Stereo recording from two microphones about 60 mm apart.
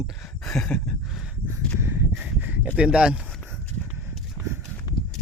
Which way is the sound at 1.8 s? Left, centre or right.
Right.